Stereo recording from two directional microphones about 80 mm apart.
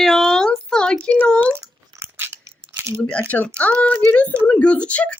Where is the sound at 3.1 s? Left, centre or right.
Centre.